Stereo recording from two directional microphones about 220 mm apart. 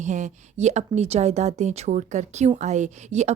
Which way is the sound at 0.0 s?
35° right (ahead or behind).